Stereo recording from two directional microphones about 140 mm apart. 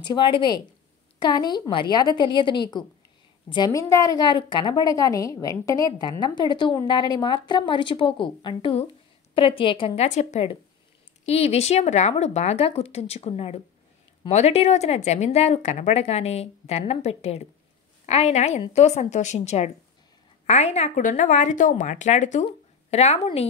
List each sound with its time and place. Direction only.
0.0 s a woman's voice: 35° left (ahead or behind)
10.0 s a woman's voice: 60° left (ahead or behind)
11.2 s a woman's voice: 50° left (ahead or behind)